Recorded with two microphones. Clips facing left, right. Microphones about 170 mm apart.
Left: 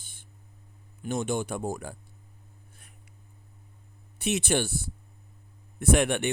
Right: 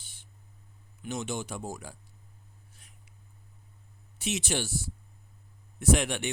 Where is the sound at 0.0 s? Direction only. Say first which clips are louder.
Left 3 dB; 50° left (ahead or behind).